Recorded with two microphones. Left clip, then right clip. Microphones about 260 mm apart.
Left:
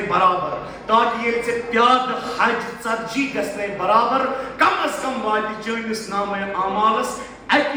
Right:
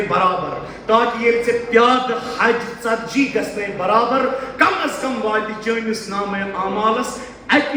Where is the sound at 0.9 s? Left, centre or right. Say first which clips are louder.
Right 2 dB; centre.